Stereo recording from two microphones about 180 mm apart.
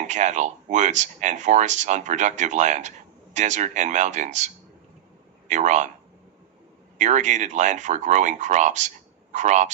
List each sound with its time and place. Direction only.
0.0 s a man's voice: 40° right (ahead or behind)
7.0 s speech: 40° right (ahead or behind)